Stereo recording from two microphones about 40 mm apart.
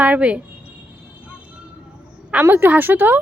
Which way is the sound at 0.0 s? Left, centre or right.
Right.